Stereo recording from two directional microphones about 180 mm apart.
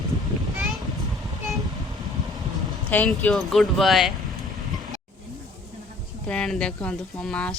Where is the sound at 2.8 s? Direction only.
10° left (ahead or behind).